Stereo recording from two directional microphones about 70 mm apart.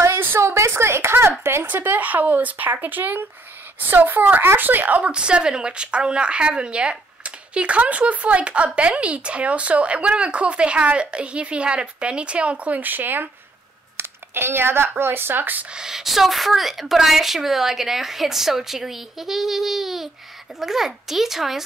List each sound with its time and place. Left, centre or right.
0.0 s a sound: right
1.4 s speech: right
15.7 s a woman's voice: centre